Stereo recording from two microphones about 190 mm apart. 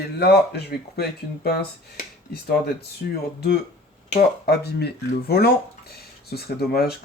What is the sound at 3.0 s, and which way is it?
Speech, 60° left (ahead or behind).